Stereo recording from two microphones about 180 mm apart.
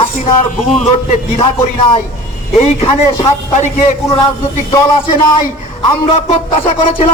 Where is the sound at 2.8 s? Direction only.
35° left (ahead or behind).